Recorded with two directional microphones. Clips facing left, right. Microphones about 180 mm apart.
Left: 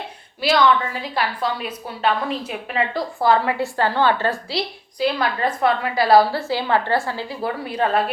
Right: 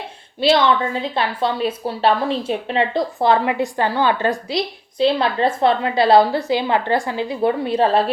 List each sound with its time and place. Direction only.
0.4 s a woman's voice: 25° right (ahead or behind)